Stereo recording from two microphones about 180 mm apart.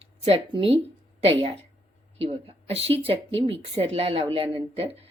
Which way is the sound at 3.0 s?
35° right (ahead or behind).